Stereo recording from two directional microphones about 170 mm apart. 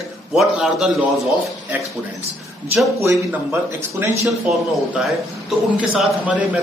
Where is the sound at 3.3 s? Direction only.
15° right (ahead or behind).